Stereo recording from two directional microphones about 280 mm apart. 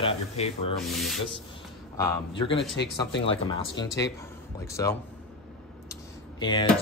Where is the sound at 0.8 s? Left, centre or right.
Centre.